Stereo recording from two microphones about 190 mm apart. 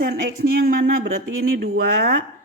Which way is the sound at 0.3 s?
50° right (ahead or behind).